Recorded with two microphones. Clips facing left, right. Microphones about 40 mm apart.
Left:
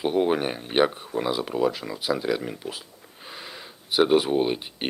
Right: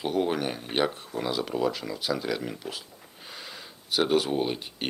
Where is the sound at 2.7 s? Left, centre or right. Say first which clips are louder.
Left 2 dB; centre.